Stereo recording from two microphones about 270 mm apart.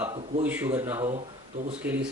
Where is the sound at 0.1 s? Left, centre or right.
Right.